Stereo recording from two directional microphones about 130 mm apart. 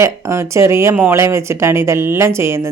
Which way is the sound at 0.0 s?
20° right (ahead or behind).